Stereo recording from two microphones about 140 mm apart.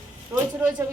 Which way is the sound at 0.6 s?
15° right (ahead or behind).